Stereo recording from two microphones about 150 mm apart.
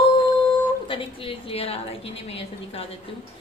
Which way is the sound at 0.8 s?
35° left (ahead or behind).